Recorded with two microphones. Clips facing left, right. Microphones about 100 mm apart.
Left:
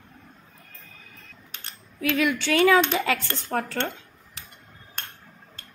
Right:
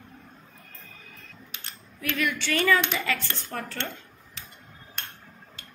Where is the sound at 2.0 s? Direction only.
90° left.